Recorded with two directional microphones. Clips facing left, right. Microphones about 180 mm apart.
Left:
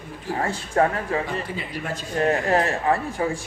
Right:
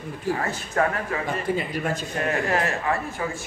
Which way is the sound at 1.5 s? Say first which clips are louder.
Right 7 dB; 50° right (ahead or behind).